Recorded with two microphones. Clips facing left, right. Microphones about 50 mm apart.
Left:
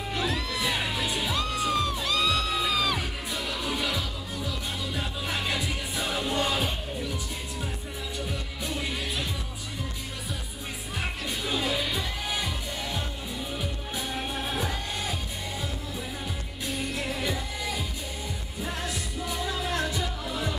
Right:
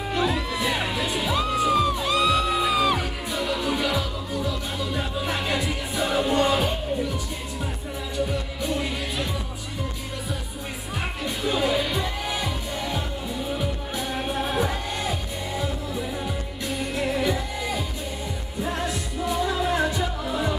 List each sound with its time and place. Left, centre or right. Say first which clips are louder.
0.1 s music: right 5 dB; centre
3.0 s music: right 5 dB; centre
8.3 s music: right 6 dB; centre
11.2 s music: right 6 dB; centre
16.6 s music: right 4 dB; centre